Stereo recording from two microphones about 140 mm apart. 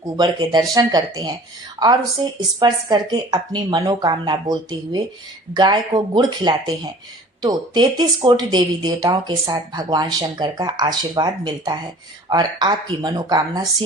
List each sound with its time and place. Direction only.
0.0 s speech: 30° right (ahead or behind)